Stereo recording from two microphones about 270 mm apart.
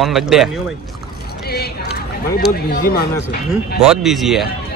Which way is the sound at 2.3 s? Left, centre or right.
Left.